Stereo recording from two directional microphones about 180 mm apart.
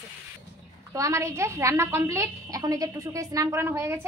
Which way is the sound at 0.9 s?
15° right (ahead or behind).